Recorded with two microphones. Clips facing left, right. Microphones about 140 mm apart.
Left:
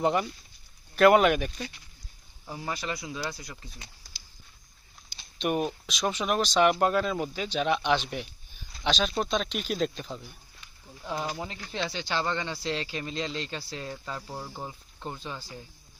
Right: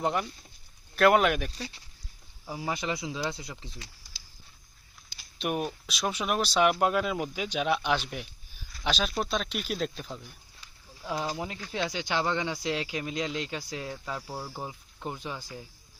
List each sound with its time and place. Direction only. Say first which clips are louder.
0.0 s speech: left 3 dB; centre (ahead or behind)
2.5 s speech: right 2 dB; 5° right (ahead or behind)
2.7 s speech: right 2 dB; 20° right (ahead or behind)
5.4 s speech: left 3 dB; centre (ahead or behind)
8.1 s a sound: left 3 dB; centre (ahead or behind)
8.8 s speech: left 2 dB; 5° right (ahead or behind)